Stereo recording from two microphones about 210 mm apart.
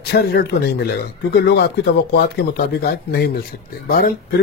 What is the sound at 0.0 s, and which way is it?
Speech, 50° left (ahead or behind).